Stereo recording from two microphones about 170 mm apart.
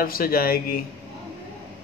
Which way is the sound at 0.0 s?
60° left (ahead or behind).